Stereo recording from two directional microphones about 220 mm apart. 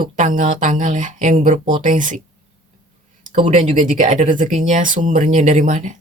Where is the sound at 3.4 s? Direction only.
30° right (ahead or behind).